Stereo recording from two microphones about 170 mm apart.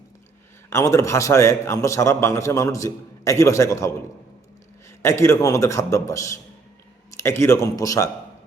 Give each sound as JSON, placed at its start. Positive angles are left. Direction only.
{"t": 0.7, "sound": "a man's voice", "side_deg": 15}
{"t": 5.0, "sound": "a man's voice", "side_deg": 15}